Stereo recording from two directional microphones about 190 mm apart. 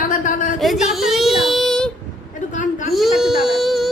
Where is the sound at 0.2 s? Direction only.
45° left (ahead or behind).